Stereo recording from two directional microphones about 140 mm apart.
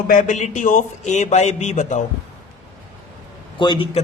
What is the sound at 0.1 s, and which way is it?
A man's voice, 65° left (ahead or behind).